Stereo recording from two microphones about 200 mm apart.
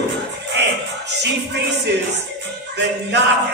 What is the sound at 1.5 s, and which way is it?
Music, 60° right (ahead or behind).